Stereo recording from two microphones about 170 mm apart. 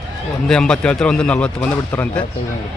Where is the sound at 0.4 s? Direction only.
5° left (ahead or behind).